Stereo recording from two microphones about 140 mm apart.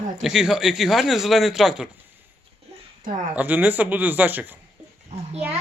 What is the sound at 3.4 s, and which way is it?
Speech, 10° right (ahead or behind).